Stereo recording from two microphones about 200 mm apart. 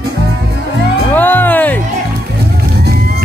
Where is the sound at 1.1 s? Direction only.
10° left (ahead or behind).